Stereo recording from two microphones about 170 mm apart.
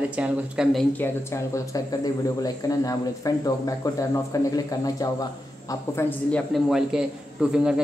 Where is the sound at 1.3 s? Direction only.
20° left (ahead or behind).